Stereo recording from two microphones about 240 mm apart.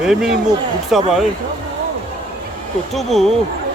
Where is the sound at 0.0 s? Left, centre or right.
Centre.